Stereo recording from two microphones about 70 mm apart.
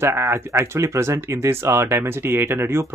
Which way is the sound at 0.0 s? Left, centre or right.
Right.